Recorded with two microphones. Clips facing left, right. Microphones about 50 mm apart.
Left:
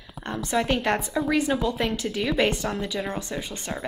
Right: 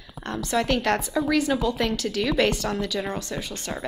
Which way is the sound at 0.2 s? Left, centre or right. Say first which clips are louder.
Even; left.